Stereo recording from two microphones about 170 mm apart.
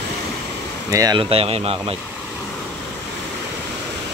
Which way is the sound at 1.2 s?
35° right (ahead or behind).